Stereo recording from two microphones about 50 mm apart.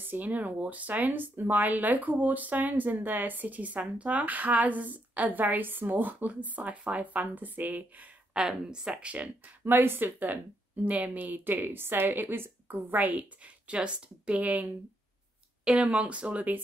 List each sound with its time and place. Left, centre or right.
0.0 s speech: right
8.3 s speech: centre
8.9 s speech: right
9.7 s speech: right
12.9 s speech: right
13.7 s speech: right